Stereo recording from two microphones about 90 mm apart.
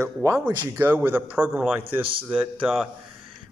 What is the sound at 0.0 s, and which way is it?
Speech, 35° right (ahead or behind).